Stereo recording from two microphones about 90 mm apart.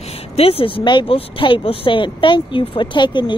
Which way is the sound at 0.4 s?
90° left.